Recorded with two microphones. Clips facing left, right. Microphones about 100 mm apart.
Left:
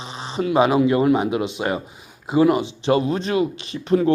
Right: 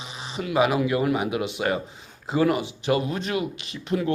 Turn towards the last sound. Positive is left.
turn(degrees=35)  # may be behind; listen again after turning